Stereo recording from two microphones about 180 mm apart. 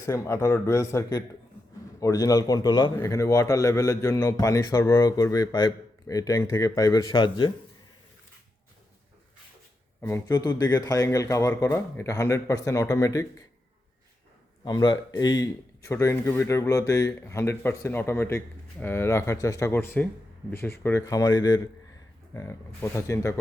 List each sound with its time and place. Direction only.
0.0 s a man's voice: 15° left (ahead or behind)
10.0 s speech: 15° left (ahead or behind)
14.6 s speech: 25° left (ahead or behind)